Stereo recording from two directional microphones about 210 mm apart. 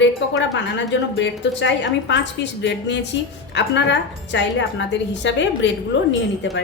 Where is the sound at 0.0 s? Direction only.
60° left (ahead or behind).